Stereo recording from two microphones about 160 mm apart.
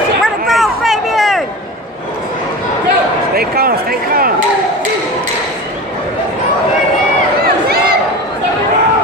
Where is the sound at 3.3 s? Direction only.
70° right (ahead or behind).